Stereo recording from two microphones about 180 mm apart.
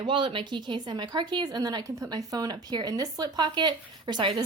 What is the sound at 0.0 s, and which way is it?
Speech, 25° right (ahead or behind).